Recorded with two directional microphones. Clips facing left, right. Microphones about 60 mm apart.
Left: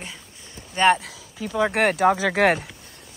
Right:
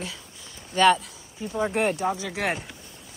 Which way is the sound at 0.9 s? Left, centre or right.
Left.